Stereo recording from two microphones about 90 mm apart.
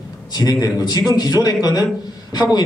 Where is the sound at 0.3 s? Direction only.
50° left (ahead or behind).